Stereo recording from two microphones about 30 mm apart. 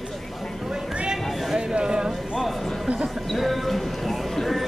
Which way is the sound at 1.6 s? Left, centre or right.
Right.